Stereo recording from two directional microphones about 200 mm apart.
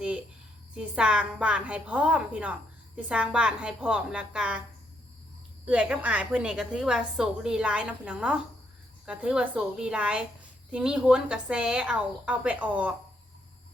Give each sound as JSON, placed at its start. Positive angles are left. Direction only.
{"t": 0.7, "sound": "a woman's voice", "side_deg": -5}
{"t": 5.6, "sound": "a woman's voice", "side_deg": -5}